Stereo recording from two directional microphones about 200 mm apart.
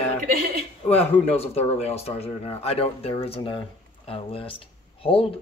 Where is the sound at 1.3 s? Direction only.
30° left (ahead or behind).